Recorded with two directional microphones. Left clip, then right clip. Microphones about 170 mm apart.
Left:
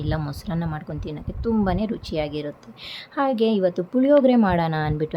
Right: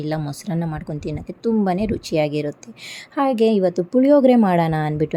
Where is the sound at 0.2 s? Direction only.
20° right (ahead or behind).